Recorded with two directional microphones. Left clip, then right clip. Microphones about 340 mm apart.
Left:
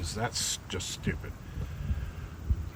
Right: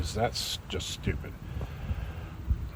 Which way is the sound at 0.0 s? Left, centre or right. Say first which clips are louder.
Right 3 dB; centre.